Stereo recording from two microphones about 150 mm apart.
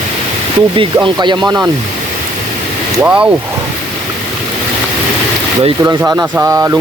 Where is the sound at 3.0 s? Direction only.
5° right (ahead or behind).